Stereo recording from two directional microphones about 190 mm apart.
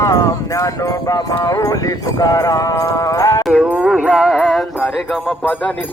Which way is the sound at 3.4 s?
5° right (ahead or behind).